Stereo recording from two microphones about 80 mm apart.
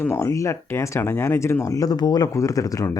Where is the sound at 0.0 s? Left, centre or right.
Left.